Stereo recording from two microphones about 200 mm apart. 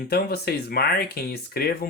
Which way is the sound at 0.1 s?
50° left (ahead or behind).